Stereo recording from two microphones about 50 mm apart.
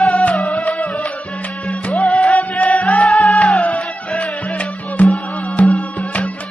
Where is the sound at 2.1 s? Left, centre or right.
Left.